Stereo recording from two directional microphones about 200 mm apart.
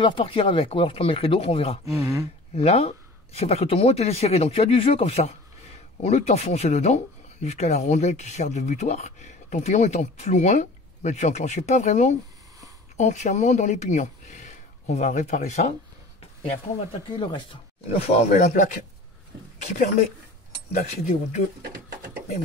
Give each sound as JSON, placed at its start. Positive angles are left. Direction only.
{"t": 0.0, "sound": "speech", "side_deg": 25}
{"t": 2.0, "sound": "speech", "side_deg": -15}
{"t": 2.5, "sound": "speech", "side_deg": 30}